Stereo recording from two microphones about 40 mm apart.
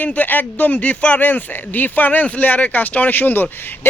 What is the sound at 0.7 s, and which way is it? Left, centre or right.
Speech, left.